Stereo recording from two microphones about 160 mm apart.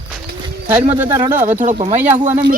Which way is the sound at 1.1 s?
25° right (ahead or behind).